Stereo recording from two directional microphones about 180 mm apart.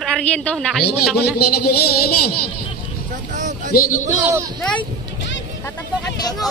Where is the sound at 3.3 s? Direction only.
45° right (ahead or behind).